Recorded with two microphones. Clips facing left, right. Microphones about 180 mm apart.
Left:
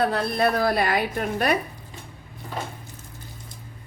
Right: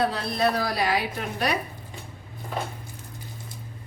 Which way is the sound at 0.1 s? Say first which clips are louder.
Left 2 dB; 55° left (ahead or behind).